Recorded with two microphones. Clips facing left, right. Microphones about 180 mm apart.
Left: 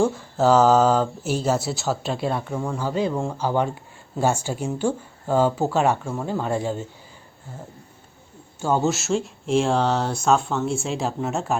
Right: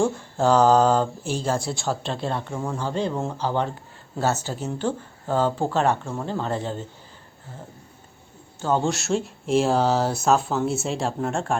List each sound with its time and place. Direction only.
0.0 s speech: 5° left (ahead or behind)
3.3 s speech: 10° left (ahead or behind)
8.6 s speech: 5° left (ahead or behind)